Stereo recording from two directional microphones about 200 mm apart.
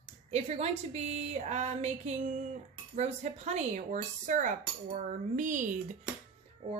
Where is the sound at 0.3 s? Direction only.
35° right (ahead or behind).